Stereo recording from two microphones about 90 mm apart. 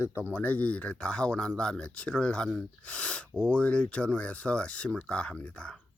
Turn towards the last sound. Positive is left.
turn(degrees=10)  # may be behind; listen again after turning